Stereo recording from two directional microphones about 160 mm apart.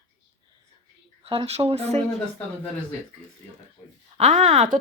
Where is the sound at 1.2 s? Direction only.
35° right (ahead or behind).